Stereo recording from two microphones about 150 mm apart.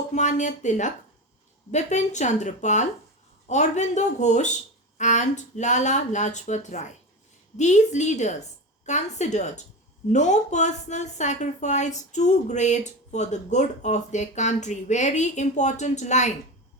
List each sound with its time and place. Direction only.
0.1 s speech: 55° left (ahead or behind)